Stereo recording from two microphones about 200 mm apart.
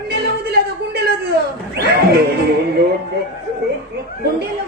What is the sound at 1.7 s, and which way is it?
Music, 55° right (ahead or behind).